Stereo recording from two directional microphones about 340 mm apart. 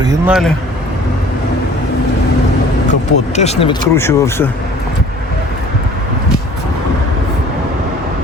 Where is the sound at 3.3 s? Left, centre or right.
Centre.